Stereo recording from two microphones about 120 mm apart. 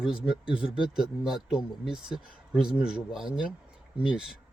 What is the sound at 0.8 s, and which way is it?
Speech, 5° right (ahead or behind).